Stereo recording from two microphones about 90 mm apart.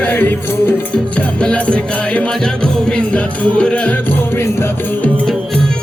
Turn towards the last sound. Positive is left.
turn(degrees=10)  # may be behind; listen again after turning